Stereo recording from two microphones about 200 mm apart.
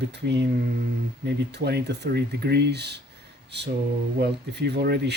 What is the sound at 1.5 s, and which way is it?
Speech, 55° right (ahead or behind).